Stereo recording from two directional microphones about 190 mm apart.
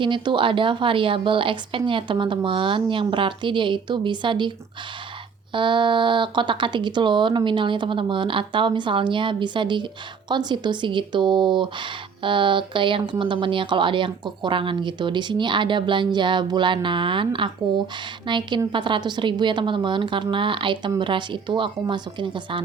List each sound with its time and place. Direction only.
0.0 s speech: 25° right (ahead or behind)
5.5 s speech: 25° right (ahead or behind)